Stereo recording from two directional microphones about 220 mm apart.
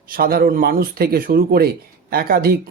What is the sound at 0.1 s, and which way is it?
Speech, 45° right (ahead or behind).